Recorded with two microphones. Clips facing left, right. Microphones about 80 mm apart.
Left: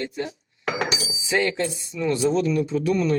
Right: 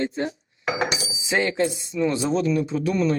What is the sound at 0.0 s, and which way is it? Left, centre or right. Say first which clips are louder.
Speech: right 4 dB; right.